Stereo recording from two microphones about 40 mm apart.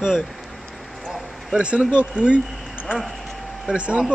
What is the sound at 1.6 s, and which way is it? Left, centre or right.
Speech, right.